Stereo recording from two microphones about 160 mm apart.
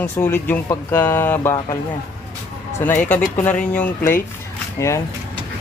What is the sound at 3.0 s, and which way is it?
Speech, 10° left (ahead or behind).